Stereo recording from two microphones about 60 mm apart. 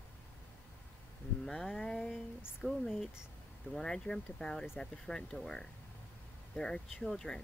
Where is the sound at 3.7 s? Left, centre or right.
Centre.